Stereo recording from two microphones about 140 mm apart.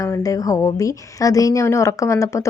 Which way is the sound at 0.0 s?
25° left (ahead or behind).